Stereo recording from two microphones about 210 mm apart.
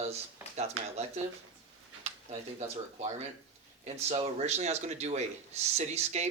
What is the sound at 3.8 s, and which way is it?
A man's voice, 30° right (ahead or behind).